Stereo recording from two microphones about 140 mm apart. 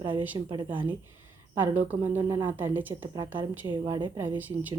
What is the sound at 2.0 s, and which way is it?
Speech, 20° right (ahead or behind).